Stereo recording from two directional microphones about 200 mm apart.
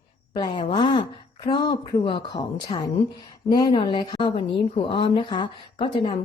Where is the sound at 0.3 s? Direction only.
25° left (ahead or behind).